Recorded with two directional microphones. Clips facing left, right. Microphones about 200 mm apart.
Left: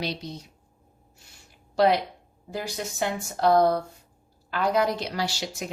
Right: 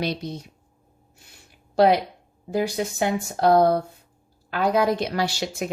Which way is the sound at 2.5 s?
55° right (ahead or behind).